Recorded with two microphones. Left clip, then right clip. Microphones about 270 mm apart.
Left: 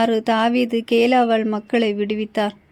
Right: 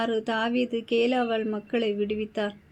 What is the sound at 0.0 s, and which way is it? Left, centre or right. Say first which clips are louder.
Speech: left 9 dB; left.